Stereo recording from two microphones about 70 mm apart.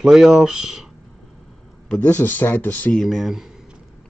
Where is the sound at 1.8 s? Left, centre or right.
Centre.